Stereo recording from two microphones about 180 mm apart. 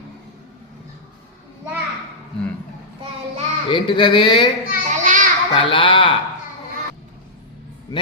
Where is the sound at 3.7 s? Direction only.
25° left (ahead or behind).